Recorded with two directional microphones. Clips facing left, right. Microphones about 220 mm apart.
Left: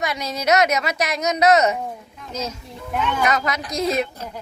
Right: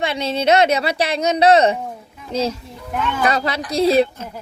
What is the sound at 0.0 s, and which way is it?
A woman's voice, 30° right (ahead or behind).